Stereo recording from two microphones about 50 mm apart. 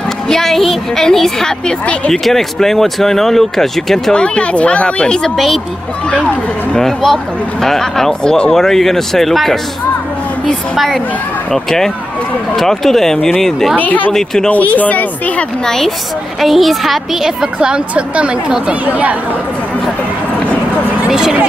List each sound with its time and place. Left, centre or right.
0.3 s speech: centre
4.1 s speech: left
6.8 s speech: centre
11.5 s speech: centre
13.7 s speech: left
14.1 s speech: centre
14.5 s speech: left
15.6 s a woman's voice: centre; by 19.1 s right
21.1 s a woman's voice: centre